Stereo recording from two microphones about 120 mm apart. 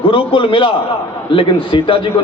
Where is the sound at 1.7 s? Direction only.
45° left (ahead or behind).